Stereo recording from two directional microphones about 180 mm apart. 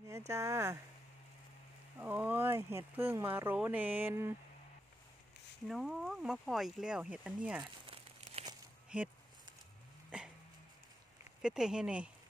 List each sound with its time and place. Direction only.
0.3 s speech: 15° right (ahead or behind)
2.0 s speech: 10° right (ahead or behind)
5.7 s speech: centre (ahead or behind)
7.9 s crumpling: 35° right (ahead or behind)
8.9 s speech: 5° right (ahead or behind)
11.4 s speech: 5° right (ahead or behind)